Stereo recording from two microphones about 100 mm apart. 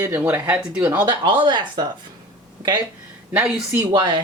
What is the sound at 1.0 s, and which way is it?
Speech, 50° right (ahead or behind).